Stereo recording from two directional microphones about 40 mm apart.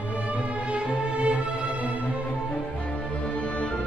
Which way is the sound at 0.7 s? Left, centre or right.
Right.